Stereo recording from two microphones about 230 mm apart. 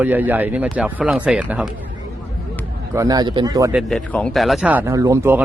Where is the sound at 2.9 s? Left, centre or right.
Centre.